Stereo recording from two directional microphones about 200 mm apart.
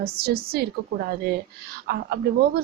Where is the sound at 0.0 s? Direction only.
50° right (ahead or behind).